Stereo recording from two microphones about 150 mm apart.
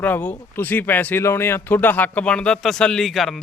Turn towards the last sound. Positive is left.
turn(degrees=0)  # may be behind; listen again after turning